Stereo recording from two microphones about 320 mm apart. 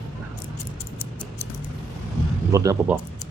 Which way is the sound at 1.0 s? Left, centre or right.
Centre.